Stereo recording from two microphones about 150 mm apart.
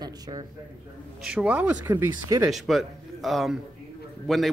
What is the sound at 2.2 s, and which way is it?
Speech, 25° right (ahead or behind).